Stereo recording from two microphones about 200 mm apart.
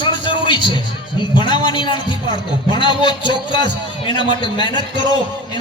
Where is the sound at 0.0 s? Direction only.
25° left (ahead or behind).